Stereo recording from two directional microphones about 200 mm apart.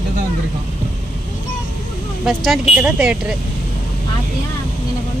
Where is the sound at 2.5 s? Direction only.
5° right (ahead or behind).